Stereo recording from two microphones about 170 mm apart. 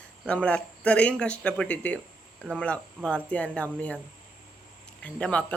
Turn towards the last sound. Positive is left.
turn(degrees=5)  # may be behind; listen again after turning